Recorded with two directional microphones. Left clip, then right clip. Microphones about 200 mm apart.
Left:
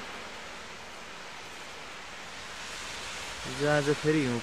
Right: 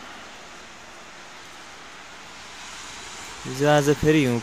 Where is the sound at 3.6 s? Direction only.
55° right (ahead or behind).